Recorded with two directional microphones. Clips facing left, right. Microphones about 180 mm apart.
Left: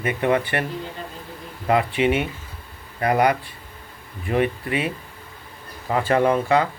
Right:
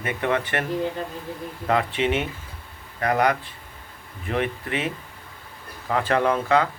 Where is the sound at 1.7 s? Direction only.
10° left (ahead or behind).